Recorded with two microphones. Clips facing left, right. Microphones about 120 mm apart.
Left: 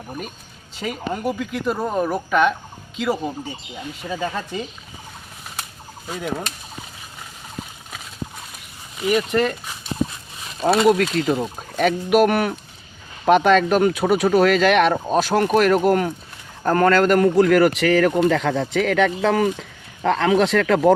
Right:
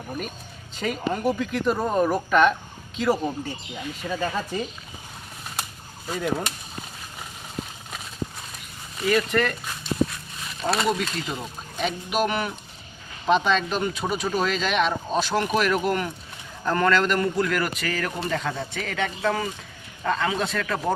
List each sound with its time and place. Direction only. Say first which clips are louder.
0.8 s speech: even; 5° left (ahead or behind)
6.1 s speech: right 1 dB; centre (ahead or behind)
9.0 s speech: left 3 dB; 20° left (ahead or behind)
10.7 s speech: left 8 dB; centre (ahead or behind)
10.9 s speech: left 10 dB; 55° left (ahead or behind); by 20.9 s 90° left